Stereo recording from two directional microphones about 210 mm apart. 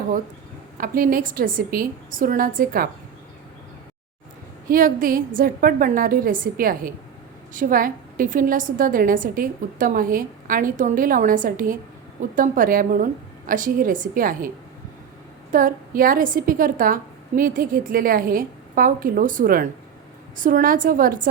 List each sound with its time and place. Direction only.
0.8 s a woman's voice: 40° right (ahead or behind)
4.7 s a woman's voice: 40° right (ahead or behind)
15.5 s a woman's voice: 40° right (ahead or behind)